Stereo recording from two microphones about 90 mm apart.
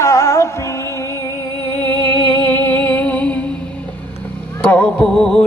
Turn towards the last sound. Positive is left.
turn(degrees=5)  # may be behind; listen again after turning